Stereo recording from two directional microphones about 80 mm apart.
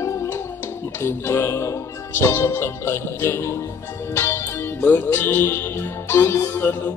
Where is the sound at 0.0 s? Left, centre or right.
Left.